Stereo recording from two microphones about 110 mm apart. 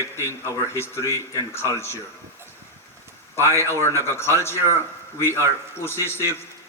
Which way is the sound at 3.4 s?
25° left (ahead or behind).